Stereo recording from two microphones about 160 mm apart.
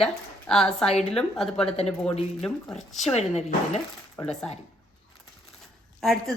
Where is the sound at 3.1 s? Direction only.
40° left (ahead or behind).